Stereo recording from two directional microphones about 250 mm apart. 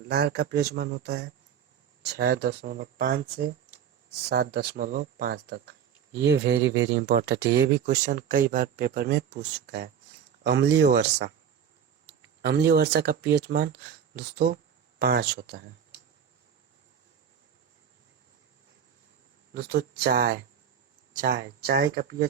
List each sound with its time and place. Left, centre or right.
0.1 s speech: right
12.4 s speech: right
19.5 s speech: right